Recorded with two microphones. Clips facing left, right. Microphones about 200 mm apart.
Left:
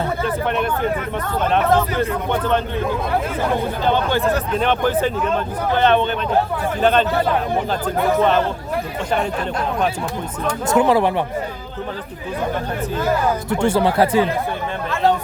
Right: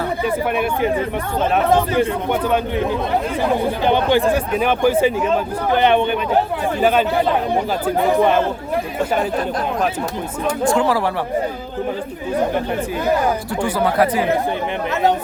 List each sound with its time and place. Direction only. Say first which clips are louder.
0.5 s speech: right 2 dB; 10° right (ahead or behind)
3.8 s speech: right 3 dB; 15° right (ahead or behind)
10.7 s speech: left 3 dB; 20° left (ahead or behind)
13.5 s speech: left 2 dB; 25° left (ahead or behind)